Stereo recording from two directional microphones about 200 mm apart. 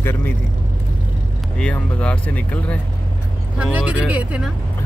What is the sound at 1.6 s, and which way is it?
Speech, 5° left (ahead or behind).